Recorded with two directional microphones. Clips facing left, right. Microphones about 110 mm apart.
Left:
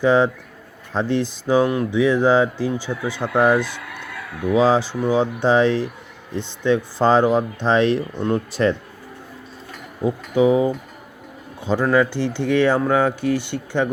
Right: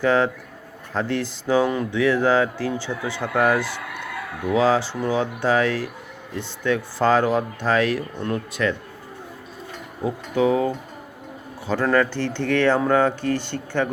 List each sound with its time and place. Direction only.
0.0 s speech: 15° left (ahead or behind)
10.0 s speech: 10° left (ahead or behind)